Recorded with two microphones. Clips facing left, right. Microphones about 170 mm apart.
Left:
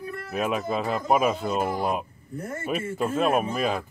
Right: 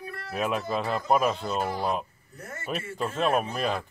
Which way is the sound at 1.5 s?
50° left (ahead or behind).